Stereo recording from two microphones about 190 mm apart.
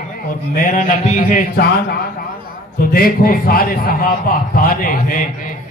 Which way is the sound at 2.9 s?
50° left (ahead or behind).